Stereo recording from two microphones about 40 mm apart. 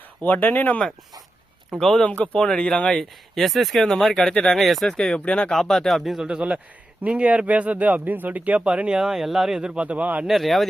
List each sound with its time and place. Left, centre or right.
0.2 s speech: left
1.8 s speech: centre
2.2 s speech: left
3.0 s speech: centre
3.8 s speech: centre
4.5 s speech: centre
4.9 s speech: left
5.5 s speech: centre
7.0 s speech: right
8.6 s speech: right
9.0 s speech: centre
9.6 s speech: right
9.8 s speech: right
10.2 s speech: centre